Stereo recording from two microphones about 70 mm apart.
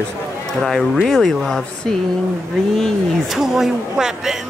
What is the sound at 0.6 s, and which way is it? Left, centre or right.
Speech, centre.